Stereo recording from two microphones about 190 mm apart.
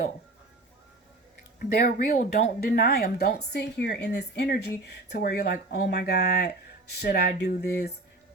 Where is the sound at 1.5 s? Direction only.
55° left (ahead or behind).